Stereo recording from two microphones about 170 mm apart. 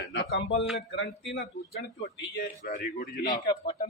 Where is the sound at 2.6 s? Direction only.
50° left (ahead or behind).